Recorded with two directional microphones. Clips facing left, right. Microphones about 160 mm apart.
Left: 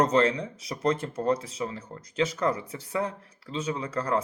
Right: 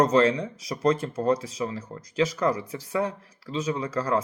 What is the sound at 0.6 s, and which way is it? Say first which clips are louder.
Speech: right 3 dB; 25° left (ahead or behind).